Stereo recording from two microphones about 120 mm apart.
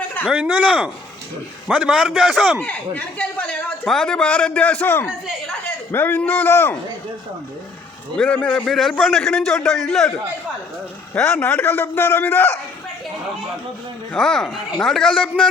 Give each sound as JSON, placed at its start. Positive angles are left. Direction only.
{"t": 0.3, "sound": "a man's voice", "side_deg": -10}
{"t": 2.6, "sound": "a man's voice", "side_deg": 15}
{"t": 8.1, "sound": "a man's voice", "side_deg": 10}
{"t": 11.1, "sound": "a man's voice", "side_deg": 10}
{"t": 14.1, "sound": "a man's voice", "side_deg": 5}